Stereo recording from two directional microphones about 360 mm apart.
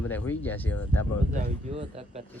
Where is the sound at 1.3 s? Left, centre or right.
Centre.